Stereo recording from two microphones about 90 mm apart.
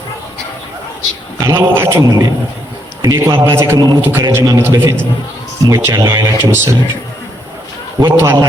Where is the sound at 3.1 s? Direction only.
25° right (ahead or behind).